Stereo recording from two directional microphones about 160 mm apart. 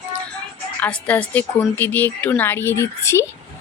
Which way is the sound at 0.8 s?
10° left (ahead or behind).